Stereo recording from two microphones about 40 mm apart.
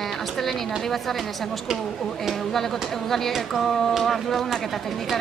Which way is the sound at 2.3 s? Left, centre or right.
Centre.